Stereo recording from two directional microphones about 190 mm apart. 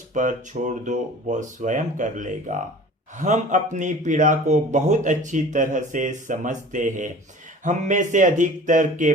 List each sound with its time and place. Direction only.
0.1 s speech: 40° right (ahead or behind)